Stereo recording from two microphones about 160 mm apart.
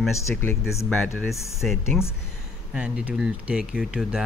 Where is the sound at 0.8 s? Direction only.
10° left (ahead or behind).